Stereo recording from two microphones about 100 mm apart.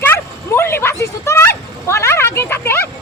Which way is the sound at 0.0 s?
25° left (ahead or behind).